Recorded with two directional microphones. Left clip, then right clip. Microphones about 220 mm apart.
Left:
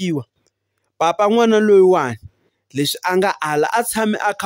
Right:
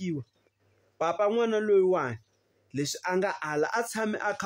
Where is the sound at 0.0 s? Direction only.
50° left (ahead or behind).